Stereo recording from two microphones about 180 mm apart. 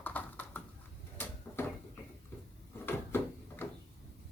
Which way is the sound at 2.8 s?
10° left (ahead or behind).